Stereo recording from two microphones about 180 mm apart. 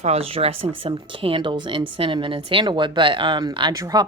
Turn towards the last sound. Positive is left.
turn(degrees=-20)  # may be behind; listen again after turning